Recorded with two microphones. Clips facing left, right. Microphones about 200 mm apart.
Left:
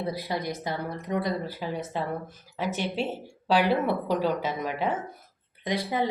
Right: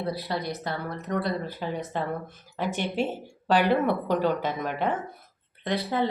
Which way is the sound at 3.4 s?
5° left (ahead or behind).